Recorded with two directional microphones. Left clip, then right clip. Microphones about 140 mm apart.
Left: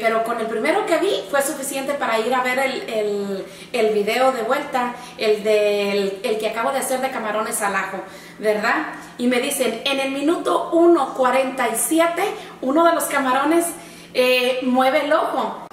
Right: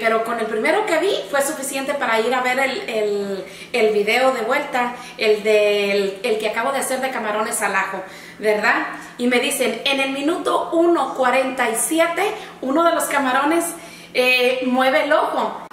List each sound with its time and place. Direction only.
0.6 s a woman's voice: centre (ahead or behind)